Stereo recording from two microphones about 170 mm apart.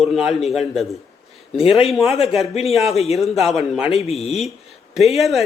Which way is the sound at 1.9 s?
Centre (ahead or behind).